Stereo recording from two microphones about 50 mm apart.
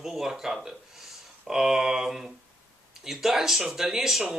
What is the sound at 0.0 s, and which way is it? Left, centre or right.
Speech, centre.